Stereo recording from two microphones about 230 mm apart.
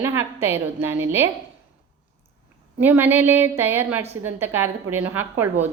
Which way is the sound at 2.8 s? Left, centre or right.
Centre.